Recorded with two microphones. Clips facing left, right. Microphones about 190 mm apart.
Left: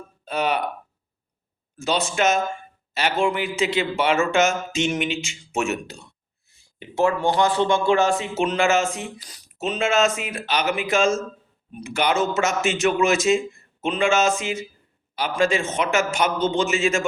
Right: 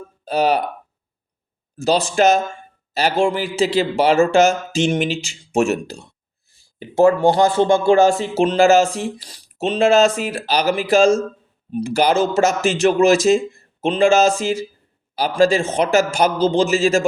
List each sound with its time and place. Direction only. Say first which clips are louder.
0.3 s speech: right 6 dB; 35° right (ahead or behind)
1.8 s speech: right 6 dB; 35° right (ahead or behind)